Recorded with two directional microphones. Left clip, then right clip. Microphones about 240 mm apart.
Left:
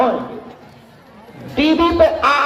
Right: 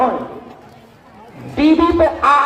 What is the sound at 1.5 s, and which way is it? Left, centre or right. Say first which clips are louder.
Speech: right 1 dB; left.